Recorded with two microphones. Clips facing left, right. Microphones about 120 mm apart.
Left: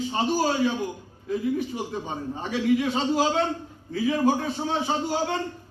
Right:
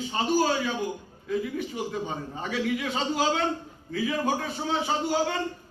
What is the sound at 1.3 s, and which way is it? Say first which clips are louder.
A man's voice: left 3 dB; 35° left (ahead or behind).